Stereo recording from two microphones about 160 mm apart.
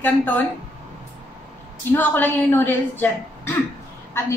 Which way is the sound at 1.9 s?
10° left (ahead or behind).